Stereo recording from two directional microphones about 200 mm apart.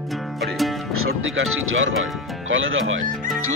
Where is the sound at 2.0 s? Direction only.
75° right (ahead or behind).